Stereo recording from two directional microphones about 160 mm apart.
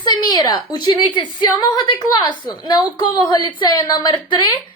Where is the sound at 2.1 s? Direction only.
30° left (ahead or behind).